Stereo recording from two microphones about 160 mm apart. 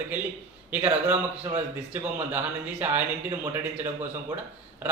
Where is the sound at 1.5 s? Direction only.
15° right (ahead or behind).